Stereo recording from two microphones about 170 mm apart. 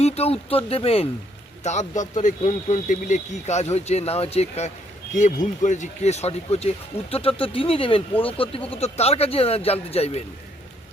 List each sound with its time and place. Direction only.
0.0 s speech: 40° left (ahead or behind)